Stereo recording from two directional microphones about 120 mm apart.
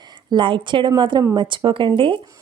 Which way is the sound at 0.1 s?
40° right (ahead or behind).